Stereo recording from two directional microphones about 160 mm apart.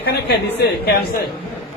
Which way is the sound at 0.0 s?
90° left.